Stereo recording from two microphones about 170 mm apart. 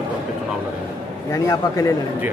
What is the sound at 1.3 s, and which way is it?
Speech, 15° left (ahead or behind).